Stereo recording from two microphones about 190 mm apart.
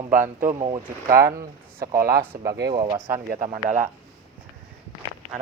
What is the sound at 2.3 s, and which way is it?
Speech, 15° right (ahead or behind).